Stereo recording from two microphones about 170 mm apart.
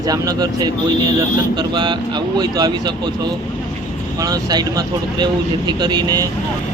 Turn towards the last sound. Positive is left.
turn(degrees=-25)  # may be behind; listen again after turning